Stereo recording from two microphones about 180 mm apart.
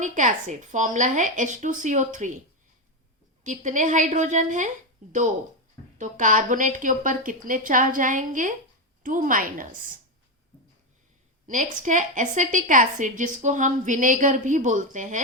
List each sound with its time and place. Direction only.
0.0 s a woman's voice: 45° right (ahead or behind)
3.4 s a woman's voice: 45° right (ahead or behind)
6.0 s a woman's voice: 45° right (ahead or behind)
11.4 s a woman's voice: 45° right (ahead or behind)